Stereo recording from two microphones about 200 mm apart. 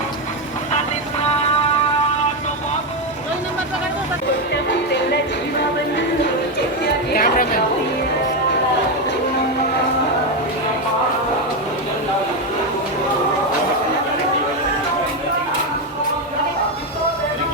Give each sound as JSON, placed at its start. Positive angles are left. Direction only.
{"t": 7.2, "sound": "chatter", "side_deg": 45}